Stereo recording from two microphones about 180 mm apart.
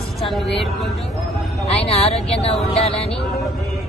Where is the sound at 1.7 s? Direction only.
35° left (ahead or behind).